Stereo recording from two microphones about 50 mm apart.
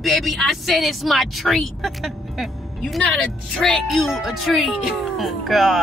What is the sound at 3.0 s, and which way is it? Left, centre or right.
Speech, left.